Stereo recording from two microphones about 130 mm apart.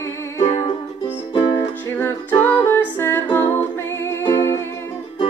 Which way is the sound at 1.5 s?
15° left (ahead or behind).